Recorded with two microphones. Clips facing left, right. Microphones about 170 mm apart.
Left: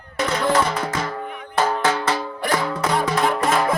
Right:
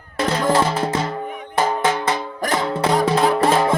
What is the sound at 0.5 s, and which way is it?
Music, 30° right (ahead or behind).